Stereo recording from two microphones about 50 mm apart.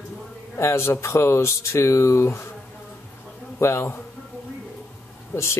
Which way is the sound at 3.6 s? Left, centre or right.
Left.